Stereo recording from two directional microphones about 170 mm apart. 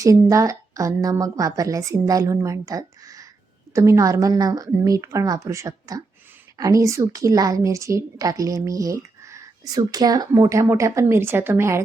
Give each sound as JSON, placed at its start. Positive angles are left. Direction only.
{"t": 0.0, "sound": "a woman's voice", "side_deg": -20}